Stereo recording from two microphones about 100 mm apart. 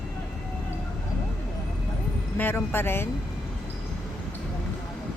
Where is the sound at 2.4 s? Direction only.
20° left (ahead or behind).